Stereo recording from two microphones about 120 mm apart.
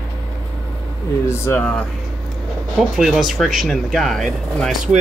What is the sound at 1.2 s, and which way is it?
Speech, 20° left (ahead or behind).